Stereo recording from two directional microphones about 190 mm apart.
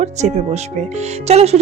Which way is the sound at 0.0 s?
35° right (ahead or behind).